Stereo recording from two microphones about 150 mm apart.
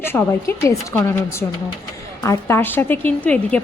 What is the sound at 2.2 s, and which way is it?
A woman's voice, 15° left (ahead or behind).